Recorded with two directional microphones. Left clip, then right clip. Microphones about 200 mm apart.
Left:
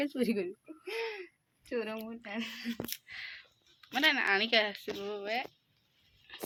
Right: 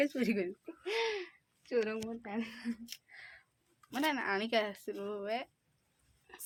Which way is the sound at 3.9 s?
15° right (ahead or behind).